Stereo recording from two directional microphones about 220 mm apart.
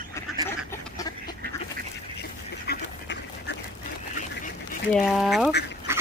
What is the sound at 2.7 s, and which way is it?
Duck, 55° left (ahead or behind).